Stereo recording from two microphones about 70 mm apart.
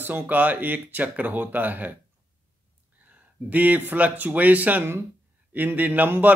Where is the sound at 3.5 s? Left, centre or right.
Right.